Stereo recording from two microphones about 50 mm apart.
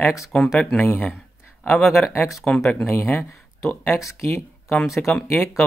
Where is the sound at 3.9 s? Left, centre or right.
Left.